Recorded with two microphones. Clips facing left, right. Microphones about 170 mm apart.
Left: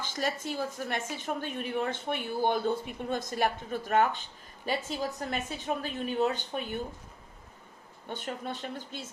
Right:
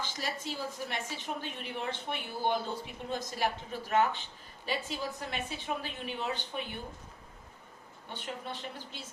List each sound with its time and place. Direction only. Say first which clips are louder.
0.0 s a woman's voice: left 5 dB; 50° left (ahead or behind)
8.1 s a woman's voice: left 4 dB; 50° left (ahead or behind)